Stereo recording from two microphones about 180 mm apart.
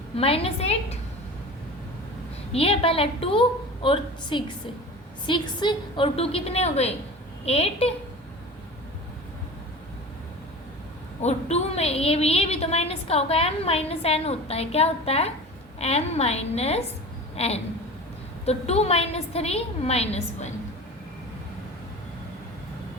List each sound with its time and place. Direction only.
0.2 s a woman's voice: 30° left (ahead or behind)
2.5 s a woman's voice: 35° left (ahead or behind)
11.2 s a woman's voice: 35° left (ahead or behind)